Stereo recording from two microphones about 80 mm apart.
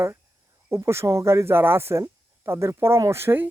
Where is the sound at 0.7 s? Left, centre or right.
Right.